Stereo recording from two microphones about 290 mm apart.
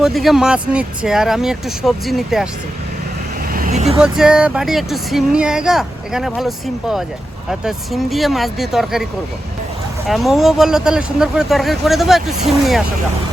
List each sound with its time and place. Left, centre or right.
0.0 s speech: centre
3.5 s vehicle: right
4.0 s speech: centre
10.1 s speech: centre